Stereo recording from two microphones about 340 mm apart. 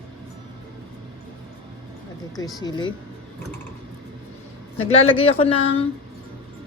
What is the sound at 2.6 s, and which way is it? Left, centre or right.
Speech, centre.